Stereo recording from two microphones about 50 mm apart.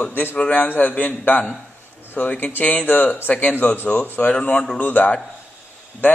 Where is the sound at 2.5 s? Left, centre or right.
Left.